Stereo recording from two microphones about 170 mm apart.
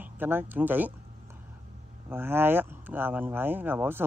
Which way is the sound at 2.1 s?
15° right (ahead or behind).